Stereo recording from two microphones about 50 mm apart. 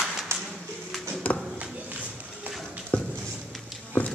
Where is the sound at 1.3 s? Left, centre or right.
Left.